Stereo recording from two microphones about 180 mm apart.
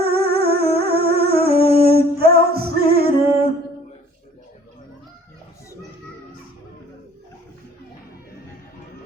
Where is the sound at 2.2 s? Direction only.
60° right (ahead or behind).